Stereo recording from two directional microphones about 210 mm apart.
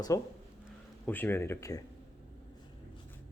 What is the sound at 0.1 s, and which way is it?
Speech, 15° left (ahead or behind).